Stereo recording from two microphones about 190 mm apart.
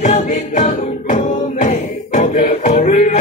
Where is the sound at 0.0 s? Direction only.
40° left (ahead or behind).